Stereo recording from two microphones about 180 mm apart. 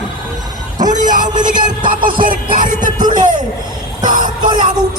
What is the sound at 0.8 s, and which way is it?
Speech, 45° right (ahead or behind).